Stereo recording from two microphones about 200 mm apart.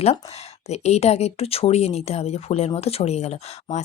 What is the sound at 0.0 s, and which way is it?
Speech, 30° left (ahead or behind).